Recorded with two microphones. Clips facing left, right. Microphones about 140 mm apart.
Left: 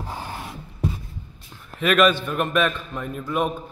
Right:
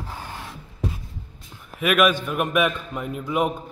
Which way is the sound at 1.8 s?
10° right (ahead or behind).